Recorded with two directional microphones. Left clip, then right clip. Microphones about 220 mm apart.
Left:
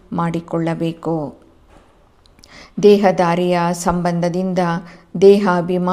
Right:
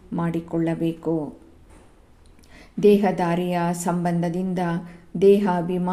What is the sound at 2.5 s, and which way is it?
A woman's voice, 20° left (ahead or behind).